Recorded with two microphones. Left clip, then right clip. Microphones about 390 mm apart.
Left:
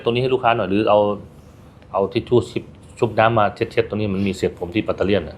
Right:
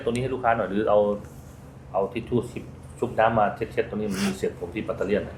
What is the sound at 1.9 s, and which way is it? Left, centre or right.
Speech, left.